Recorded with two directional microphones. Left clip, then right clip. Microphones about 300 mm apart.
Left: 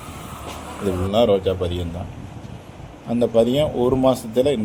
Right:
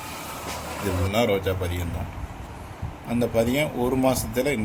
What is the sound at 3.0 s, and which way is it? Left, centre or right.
Speech, centre.